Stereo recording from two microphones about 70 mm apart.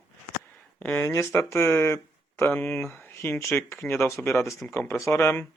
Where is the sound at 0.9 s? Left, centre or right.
Left.